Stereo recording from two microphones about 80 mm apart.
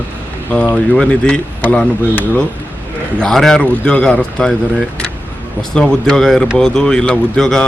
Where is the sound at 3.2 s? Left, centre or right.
Centre.